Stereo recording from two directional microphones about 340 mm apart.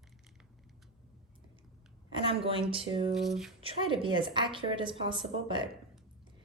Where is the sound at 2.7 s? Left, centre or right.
Centre.